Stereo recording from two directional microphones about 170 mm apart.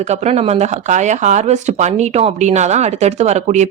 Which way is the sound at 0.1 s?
40° right (ahead or behind).